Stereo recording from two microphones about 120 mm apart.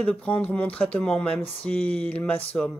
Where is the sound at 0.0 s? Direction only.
10° left (ahead or behind).